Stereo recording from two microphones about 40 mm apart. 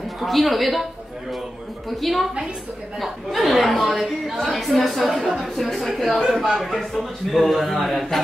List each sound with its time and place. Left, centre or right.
0.2 s a man's voice: centre
1.9 s a man's voice: centre